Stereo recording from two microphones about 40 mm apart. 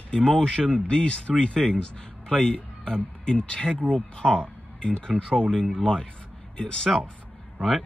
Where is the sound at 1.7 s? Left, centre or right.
Centre.